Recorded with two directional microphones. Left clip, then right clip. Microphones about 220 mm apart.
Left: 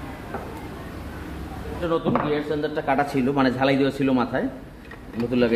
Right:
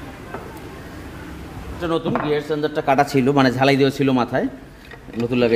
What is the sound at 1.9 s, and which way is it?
Speech, 50° right (ahead or behind).